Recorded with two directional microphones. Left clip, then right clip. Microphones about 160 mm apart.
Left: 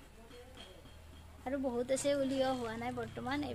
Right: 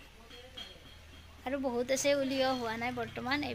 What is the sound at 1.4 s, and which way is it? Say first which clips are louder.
Speech: right 3 dB; 15° right (ahead or behind).